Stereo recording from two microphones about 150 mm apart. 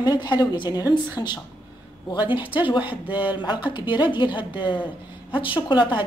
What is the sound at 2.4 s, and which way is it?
Speech, 10° right (ahead or behind).